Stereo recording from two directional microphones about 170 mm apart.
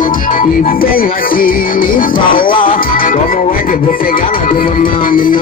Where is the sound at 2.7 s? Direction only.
55° left (ahead or behind).